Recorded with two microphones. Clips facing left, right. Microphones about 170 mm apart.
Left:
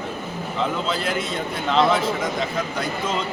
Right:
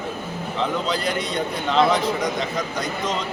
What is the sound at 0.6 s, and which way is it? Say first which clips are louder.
A man's voice: right 1 dB; centre (ahead or behind).